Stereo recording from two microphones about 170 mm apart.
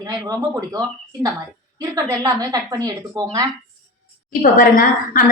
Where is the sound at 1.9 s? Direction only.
20° right (ahead or behind).